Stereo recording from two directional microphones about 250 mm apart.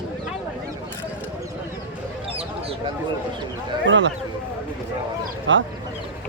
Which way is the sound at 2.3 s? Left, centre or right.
Right.